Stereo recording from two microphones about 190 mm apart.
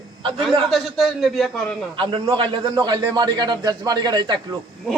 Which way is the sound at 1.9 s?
25° right (ahead or behind).